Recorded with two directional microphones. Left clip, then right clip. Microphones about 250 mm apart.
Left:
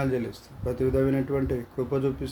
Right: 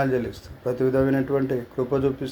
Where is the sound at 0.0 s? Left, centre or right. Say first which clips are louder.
Right 5 dB; centre.